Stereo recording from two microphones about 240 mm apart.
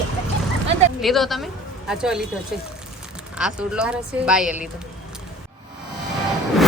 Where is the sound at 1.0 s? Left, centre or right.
Centre.